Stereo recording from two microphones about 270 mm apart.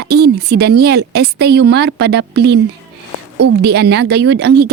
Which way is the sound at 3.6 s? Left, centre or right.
Right.